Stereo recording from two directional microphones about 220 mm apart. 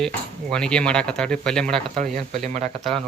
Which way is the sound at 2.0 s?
35° right (ahead or behind).